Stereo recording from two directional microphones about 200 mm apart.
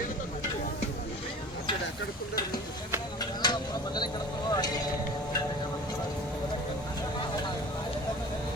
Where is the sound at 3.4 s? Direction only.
20° left (ahead or behind).